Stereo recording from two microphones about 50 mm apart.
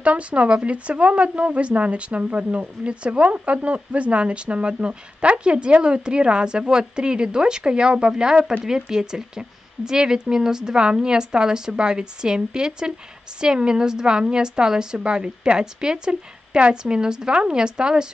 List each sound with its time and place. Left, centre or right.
0.0 s a woman's voice: right